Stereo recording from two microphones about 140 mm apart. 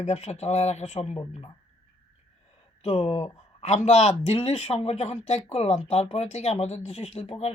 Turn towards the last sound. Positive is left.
turn(degrees=45)  # may be behind; listen again after turning